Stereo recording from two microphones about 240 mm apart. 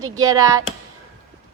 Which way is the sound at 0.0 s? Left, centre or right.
Centre.